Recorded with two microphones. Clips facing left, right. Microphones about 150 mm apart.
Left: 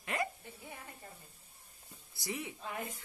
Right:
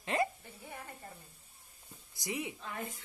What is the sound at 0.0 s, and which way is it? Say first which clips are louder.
Hiccup: right 4 dB; 25° right (ahead or behind).